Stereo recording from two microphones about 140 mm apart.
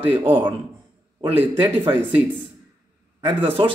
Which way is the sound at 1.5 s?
15° right (ahead or behind).